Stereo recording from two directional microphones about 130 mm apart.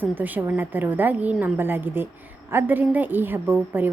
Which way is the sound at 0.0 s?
15° right (ahead or behind).